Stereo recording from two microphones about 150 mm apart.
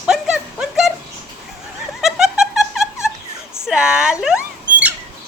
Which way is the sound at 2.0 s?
5° right (ahead or behind).